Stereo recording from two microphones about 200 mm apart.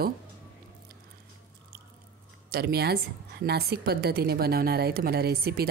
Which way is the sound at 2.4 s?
50° right (ahead or behind).